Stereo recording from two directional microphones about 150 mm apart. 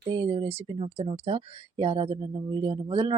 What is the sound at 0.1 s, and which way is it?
Speech, 35° right (ahead or behind).